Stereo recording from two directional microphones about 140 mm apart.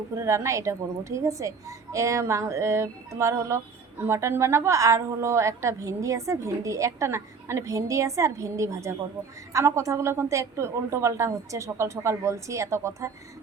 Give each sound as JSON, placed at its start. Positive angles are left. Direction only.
{"t": 0.2, "sound": "a woman's voice", "side_deg": -20}